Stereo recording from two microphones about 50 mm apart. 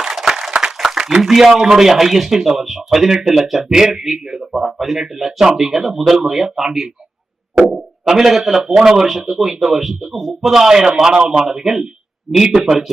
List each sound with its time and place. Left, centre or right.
0.0 s a man's voice: centre
7.7 s a man's voice: centre